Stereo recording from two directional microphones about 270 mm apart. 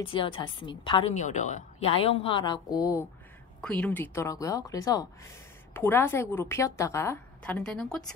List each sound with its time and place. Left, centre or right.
0.0 s a woman's voice: centre